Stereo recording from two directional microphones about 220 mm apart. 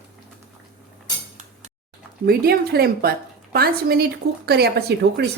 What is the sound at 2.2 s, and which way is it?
A woman's voice, 45° right (ahead or behind).